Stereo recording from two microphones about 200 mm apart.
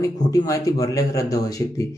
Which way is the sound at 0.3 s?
15° left (ahead or behind).